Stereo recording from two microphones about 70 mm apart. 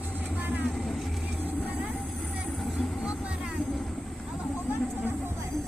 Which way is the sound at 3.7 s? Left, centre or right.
Centre.